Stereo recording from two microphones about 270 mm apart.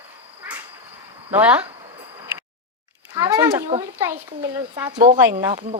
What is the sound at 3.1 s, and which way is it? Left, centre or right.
Speech, centre.